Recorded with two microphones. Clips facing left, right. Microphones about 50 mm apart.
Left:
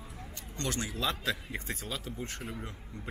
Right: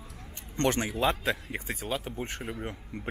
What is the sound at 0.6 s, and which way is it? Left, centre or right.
Speech, right.